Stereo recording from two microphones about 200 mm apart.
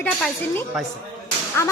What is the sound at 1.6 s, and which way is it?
Speech, 15° left (ahead or behind).